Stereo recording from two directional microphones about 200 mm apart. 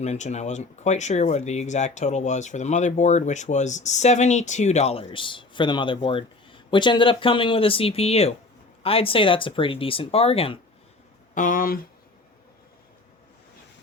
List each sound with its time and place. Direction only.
0.0 s speech: 35° left (ahead or behind)
11.3 s speech: 40° left (ahead or behind)